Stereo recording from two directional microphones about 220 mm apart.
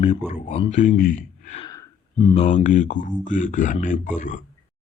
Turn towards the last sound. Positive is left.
turn(degrees=35)  # may be behind; listen again after turning